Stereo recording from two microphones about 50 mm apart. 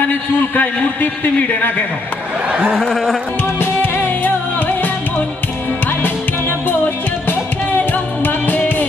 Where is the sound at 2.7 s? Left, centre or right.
Centre.